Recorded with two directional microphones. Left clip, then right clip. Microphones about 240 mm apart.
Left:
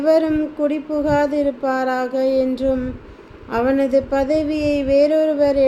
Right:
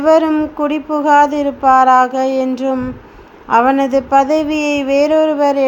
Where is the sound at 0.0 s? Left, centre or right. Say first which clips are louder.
Right 5 dB; centre.